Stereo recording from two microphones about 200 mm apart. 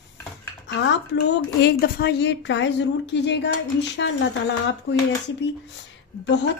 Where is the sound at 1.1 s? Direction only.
60° left (ahead or behind).